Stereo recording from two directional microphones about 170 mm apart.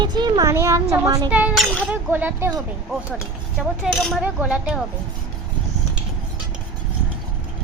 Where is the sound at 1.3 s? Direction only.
10° right (ahead or behind).